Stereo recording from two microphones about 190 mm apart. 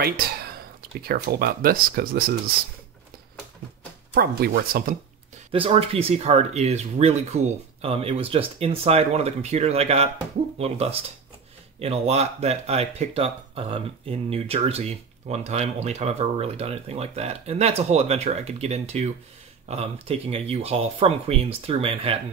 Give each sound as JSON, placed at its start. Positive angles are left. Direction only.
{"t": 0.0, "sound": "speech", "side_deg": -55}
{"t": 4.1, "sound": "speech", "side_deg": -55}
{"t": 5.5, "sound": "speech", "side_deg": -30}